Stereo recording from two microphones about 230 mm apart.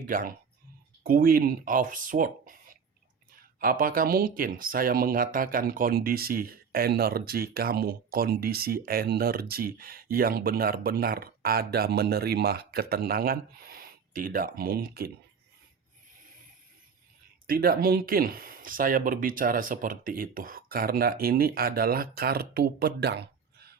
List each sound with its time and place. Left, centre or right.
0.1 s speech: right
17.4 s speech: right